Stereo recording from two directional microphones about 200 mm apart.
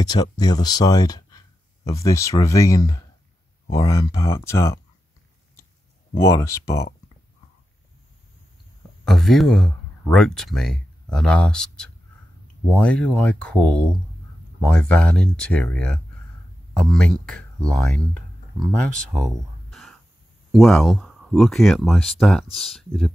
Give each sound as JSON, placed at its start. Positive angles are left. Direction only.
{"t": 0.0, "sound": "speech", "side_deg": 20}
{"t": 6.1, "sound": "speech", "side_deg": 15}
{"t": 9.0, "sound": "speech", "side_deg": 0}